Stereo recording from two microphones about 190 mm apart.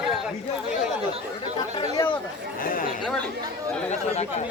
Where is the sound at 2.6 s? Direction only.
45° left (ahead or behind).